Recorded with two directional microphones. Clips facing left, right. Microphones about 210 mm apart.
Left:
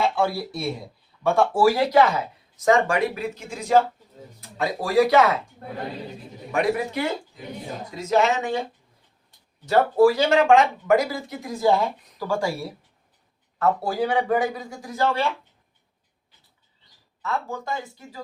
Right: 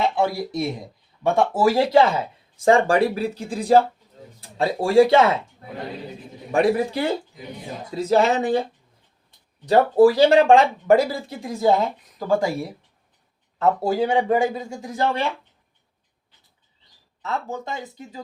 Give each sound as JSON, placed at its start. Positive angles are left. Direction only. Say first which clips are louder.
{"t": 0.0, "sound": "a man's voice", "louder": "right 1 dB", "side_deg": -20}
{"t": 6.5, "sound": "speech", "louder": "right 4 dB", "side_deg": -30}
{"t": 9.6, "sound": "speech", "louder": "right 3 dB", "side_deg": -35}
{"t": 13.6, "sound": "a man's voice", "louder": "right 3 dB", "side_deg": -25}
{"t": 17.2, "sound": "a man's voice", "louder": "even", "side_deg": -20}